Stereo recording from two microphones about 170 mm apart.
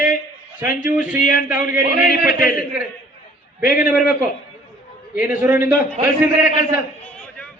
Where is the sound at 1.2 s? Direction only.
55° left (ahead or behind).